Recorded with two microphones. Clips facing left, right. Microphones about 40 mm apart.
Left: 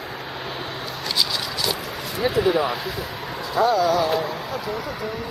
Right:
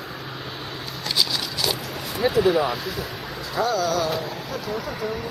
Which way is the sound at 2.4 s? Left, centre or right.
Centre.